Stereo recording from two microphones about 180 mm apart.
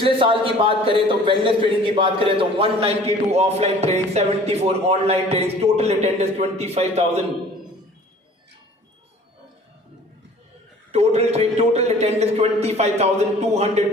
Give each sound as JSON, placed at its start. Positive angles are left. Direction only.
{"t": 0.0, "sound": "speech", "side_deg": -30}
{"t": 10.9, "sound": "speech", "side_deg": -35}